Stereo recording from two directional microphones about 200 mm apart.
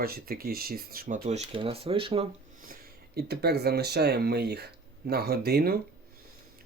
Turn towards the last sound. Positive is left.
turn(degrees=-50)  # may be behind; listen again after turning